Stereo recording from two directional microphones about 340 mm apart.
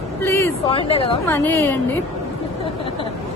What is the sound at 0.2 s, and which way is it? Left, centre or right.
A woman's voice, centre.